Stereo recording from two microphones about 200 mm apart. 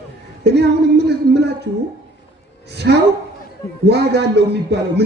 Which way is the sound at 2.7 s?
55° right (ahead or behind).